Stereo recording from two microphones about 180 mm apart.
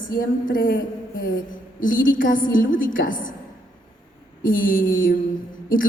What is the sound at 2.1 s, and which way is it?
A woman's voice, 50° left (ahead or behind).